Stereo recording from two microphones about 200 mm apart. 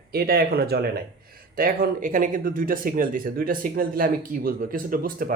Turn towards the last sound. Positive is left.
turn(degrees=-45)  # may be behind; listen again after turning